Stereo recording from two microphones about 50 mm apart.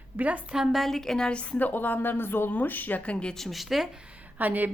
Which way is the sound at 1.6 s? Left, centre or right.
Left.